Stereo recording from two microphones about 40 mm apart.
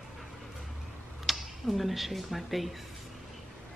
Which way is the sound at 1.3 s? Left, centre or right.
Centre.